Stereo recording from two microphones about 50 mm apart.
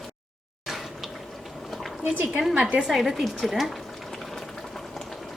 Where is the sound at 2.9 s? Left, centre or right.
Centre.